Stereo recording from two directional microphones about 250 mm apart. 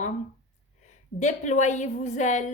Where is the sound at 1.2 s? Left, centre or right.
Left.